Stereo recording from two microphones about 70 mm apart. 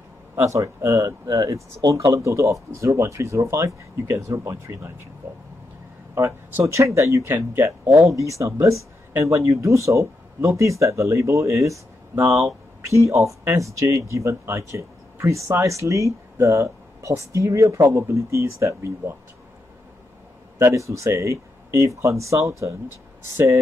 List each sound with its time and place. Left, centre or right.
0.4 s speech: right
6.6 s speech: right
20.5 s speech: right